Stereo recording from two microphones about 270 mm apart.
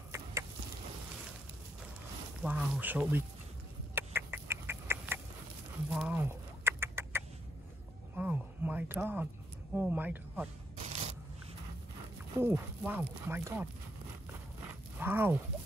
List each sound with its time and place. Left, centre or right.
0.1 s a sound: centre
2.4 s speech: centre
3.9 s rodents: centre
5.9 s chicken: centre
8.2 s a sound: centre
9.8 s speech: centre
10.8 s a sound: right
12.4 s speech: centre
15.0 s speech: centre